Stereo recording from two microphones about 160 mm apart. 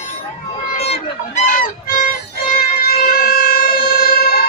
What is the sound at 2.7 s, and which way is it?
Wind instrument, 65° left (ahead or behind).